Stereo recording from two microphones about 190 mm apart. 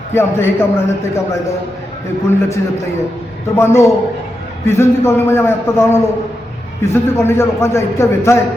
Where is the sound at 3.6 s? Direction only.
15° left (ahead or behind).